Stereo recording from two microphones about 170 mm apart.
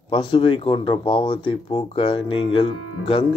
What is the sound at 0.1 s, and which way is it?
Speech, 30° left (ahead or behind).